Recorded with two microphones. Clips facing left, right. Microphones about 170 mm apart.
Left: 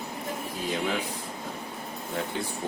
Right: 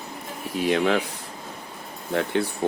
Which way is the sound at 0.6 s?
75° right (ahead or behind).